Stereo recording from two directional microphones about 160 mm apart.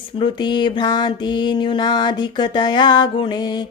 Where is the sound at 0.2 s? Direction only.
30° left (ahead or behind).